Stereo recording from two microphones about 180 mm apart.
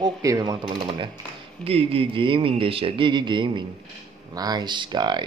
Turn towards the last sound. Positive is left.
turn(degrees=-25)  # may be behind; listen again after turning